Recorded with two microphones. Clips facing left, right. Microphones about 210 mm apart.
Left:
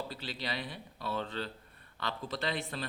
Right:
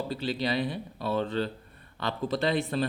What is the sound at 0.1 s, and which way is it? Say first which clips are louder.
Speech: right 10 dB; 25° right (ahead or behind).